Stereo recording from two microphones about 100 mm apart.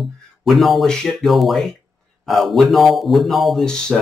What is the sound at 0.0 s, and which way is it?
Speech, centre (ahead or behind).